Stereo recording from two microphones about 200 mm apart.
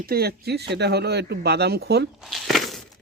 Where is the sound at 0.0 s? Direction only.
50° right (ahead or behind).